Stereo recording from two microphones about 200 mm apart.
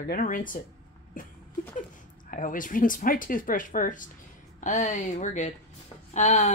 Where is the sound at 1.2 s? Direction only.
40° left (ahead or behind).